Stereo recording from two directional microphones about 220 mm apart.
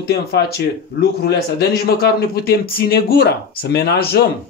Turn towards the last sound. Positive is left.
turn(degrees=45)  # may be behind; listen again after turning